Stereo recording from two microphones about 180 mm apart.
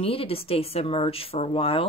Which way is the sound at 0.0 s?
30° left (ahead or behind).